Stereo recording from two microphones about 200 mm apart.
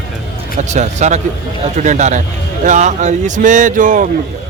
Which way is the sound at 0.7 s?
35° right (ahead or behind).